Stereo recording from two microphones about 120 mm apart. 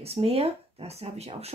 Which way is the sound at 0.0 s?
55° right (ahead or behind).